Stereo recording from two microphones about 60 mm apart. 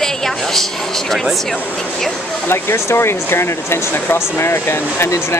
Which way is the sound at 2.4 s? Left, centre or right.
Left.